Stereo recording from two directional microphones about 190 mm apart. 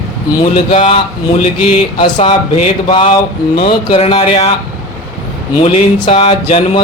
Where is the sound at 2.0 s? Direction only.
30° left (ahead or behind).